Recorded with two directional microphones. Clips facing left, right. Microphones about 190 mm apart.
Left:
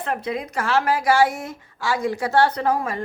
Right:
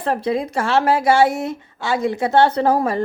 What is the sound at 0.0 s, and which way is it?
A woman's voice, 30° right (ahead or behind).